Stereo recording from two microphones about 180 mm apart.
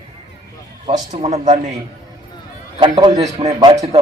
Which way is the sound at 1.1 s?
40° right (ahead or behind).